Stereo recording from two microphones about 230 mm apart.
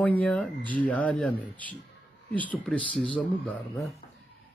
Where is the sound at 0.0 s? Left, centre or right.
Centre.